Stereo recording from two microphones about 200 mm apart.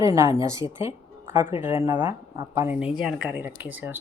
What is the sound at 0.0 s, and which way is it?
Speech, 15° right (ahead or behind).